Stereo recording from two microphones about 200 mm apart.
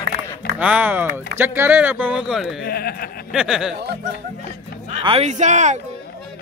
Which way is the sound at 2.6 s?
50° left (ahead or behind).